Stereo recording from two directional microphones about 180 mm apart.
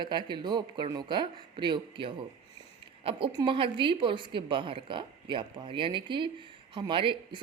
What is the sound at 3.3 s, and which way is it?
A woman's voice, 30° right (ahead or behind).